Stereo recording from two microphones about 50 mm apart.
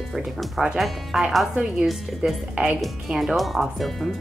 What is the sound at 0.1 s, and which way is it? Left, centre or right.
Speech, centre.